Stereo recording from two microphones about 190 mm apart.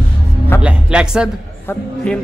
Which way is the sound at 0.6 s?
5° right (ahead or behind).